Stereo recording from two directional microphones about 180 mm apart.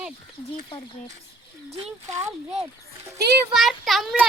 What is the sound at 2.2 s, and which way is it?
Speech, 15° right (ahead or behind).